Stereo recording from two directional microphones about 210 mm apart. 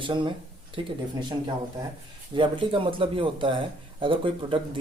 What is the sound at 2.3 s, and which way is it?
Speech, 25° right (ahead or behind).